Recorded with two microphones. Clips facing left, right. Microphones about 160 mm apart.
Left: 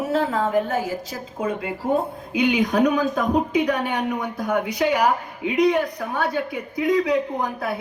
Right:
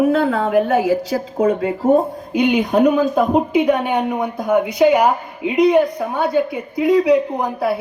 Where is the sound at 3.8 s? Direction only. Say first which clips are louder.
Right 5 dB; 5° right (ahead or behind).